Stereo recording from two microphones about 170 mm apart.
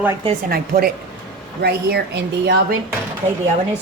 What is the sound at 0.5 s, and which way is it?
Speech, 65° right (ahead or behind).